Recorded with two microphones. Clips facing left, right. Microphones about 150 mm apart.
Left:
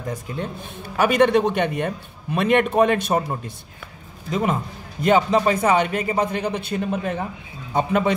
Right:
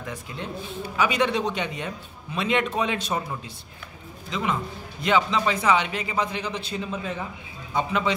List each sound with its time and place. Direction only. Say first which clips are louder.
0.0 s a man's voice: left 6 dB; 40° left (ahead or behind)
0.9 s a man's voice: left 7 dB; 55° left (ahead or behind)
4.3 s speech: left 5 dB; 45° left (ahead or behind)